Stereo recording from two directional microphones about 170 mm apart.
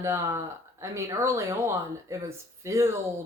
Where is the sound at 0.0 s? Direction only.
15° right (ahead or behind).